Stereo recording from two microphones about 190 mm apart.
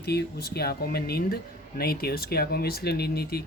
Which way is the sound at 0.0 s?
60° left (ahead or behind).